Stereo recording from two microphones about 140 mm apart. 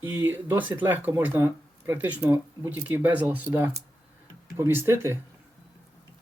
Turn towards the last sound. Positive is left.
turn(degrees=-15)  # may be behind; listen again after turning